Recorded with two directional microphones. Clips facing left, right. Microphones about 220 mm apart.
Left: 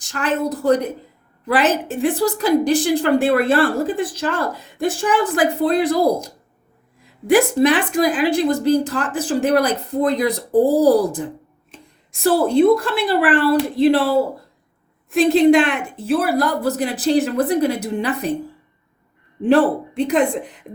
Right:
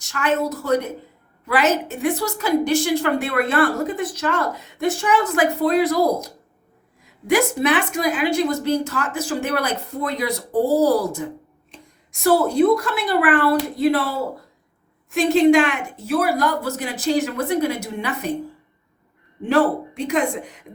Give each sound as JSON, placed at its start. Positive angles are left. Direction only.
{"t": 0.0, "sound": "a woman's voice", "side_deg": 35}
{"t": 12.5, "sound": "a woman's voice", "side_deg": 30}
{"t": 19.4, "sound": "a woman's voice", "side_deg": 35}